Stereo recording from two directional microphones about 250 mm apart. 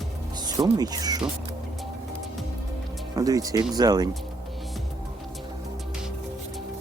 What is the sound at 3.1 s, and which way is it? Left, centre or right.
Speech, centre.